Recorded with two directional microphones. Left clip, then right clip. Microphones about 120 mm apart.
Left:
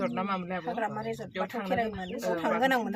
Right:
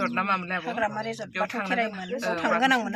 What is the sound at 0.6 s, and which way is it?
Speech, 30° right (ahead or behind).